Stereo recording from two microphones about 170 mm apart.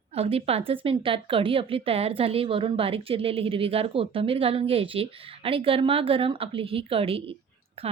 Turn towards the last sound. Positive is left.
turn(degrees=-35)  # may be behind; listen again after turning